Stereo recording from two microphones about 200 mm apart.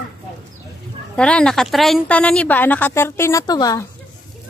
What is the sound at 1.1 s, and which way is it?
A woman's voice, 5° left (ahead or behind).